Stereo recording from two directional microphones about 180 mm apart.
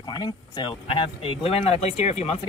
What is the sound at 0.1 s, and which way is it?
Speech, 25° left (ahead or behind).